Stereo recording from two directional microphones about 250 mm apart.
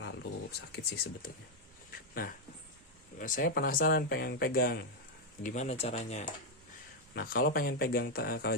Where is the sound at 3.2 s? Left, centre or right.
Left.